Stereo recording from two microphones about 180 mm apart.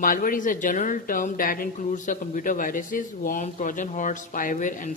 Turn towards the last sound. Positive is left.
turn(degrees=45)  # may be behind; listen again after turning